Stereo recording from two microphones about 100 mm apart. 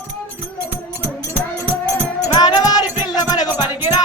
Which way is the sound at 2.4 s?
40° left (ahead or behind).